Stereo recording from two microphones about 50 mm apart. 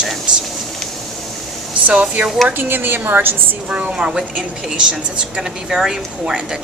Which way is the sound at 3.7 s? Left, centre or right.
Right.